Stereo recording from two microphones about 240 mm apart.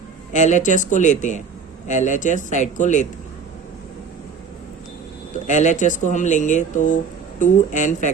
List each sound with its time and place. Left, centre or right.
0.3 s speech: left
5.5 s speech: left